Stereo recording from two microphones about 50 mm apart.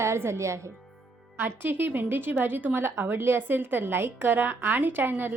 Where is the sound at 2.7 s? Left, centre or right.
Right.